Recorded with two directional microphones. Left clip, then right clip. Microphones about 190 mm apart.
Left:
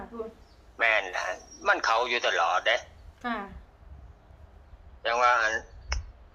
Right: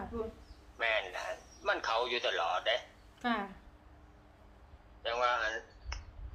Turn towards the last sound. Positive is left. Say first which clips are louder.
# left 8 dB
turn(degrees=55)  # may be behind; listen again after turning